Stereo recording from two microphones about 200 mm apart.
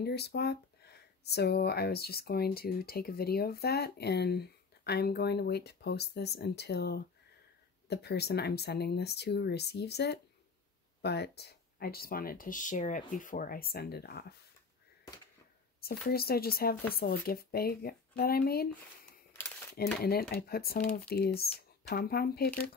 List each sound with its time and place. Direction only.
0.0 s speech: 55° left (ahead or behind)
15.8 s speech: 50° left (ahead or behind)
19.7 s speech: 50° left (ahead or behind)